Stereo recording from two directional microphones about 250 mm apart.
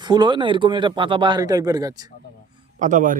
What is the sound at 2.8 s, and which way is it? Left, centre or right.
Speech, right.